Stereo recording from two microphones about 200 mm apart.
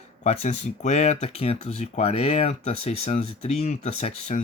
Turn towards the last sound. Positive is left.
turn(degrees=30)  # may be behind; listen again after turning